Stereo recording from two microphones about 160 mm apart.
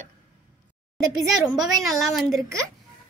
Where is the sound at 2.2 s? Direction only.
Centre (ahead or behind).